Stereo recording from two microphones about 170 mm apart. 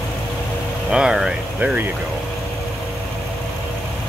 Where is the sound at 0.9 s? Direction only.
5° right (ahead or behind).